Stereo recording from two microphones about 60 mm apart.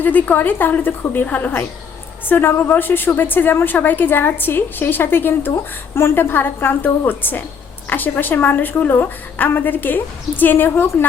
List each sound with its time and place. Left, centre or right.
0.0 s a woman's voice: left